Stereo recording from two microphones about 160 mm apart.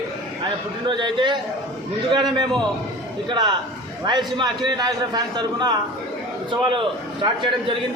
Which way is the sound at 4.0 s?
25° right (ahead or behind).